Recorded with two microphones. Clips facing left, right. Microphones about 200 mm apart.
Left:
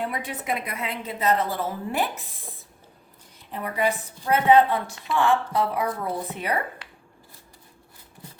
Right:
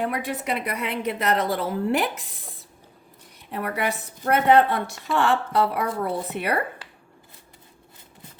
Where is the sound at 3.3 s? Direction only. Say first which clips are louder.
Right 1 dB; 70° right (ahead or behind).